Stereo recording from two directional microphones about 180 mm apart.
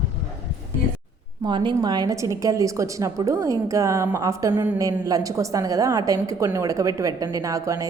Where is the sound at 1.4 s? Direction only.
25° right (ahead or behind).